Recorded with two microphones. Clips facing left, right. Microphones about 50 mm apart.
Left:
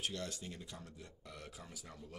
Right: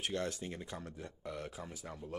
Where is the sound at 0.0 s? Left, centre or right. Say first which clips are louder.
Right 5 dB; right.